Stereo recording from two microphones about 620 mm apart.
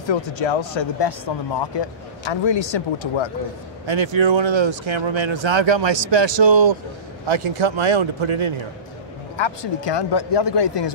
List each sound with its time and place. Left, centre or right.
0.1 s speech: left
3.8 s speech: right
9.4 s speech: left